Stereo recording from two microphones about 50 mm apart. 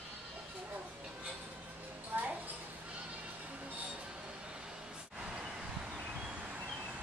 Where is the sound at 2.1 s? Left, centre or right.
Right.